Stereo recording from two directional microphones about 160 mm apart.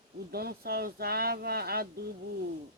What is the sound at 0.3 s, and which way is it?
Speech, 75° right (ahead or behind).